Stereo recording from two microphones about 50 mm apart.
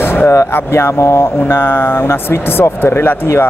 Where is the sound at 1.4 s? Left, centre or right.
Left.